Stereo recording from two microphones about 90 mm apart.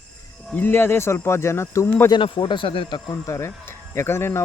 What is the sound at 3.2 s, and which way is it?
Speech, 30° left (ahead or behind).